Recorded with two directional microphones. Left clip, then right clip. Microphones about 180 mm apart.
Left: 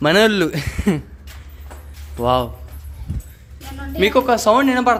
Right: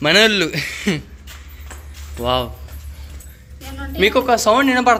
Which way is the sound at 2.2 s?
25° left (ahead or behind).